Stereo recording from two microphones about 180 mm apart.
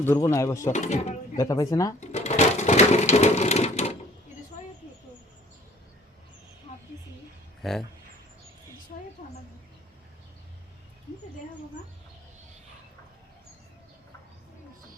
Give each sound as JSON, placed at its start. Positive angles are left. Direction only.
{"t": 0.0, "sound": "speech", "side_deg": 15}
{"t": 0.7, "sound": "speech", "side_deg": 40}
{"t": 1.4, "sound": "speech", "side_deg": 20}
{"t": 2.0, "sound": "sewing machine", "side_deg": 40}
{"t": 7.6, "sound": "speech", "side_deg": 0}
{"t": 8.9, "sound": "a sound", "side_deg": 45}